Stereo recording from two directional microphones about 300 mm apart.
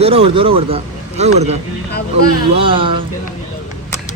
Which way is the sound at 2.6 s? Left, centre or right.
Centre.